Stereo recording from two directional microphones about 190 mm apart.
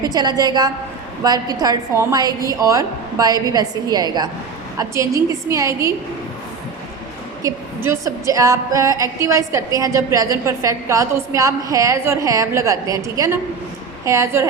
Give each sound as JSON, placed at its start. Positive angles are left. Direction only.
{"t": 0.0, "sound": "a woman's voice", "side_deg": -20}
{"t": 7.4, "sound": "speech", "side_deg": -15}